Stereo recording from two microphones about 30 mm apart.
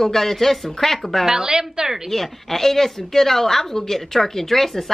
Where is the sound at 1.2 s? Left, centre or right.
Right.